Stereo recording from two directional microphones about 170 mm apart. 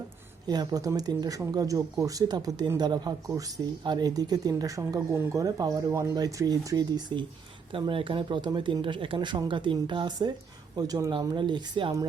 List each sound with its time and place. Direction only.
0.4 s speech: 25° right (ahead or behind)